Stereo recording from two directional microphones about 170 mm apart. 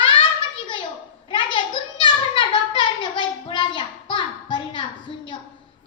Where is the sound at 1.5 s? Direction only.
30° left (ahead or behind).